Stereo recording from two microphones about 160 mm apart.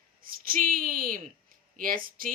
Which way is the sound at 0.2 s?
65° right (ahead or behind).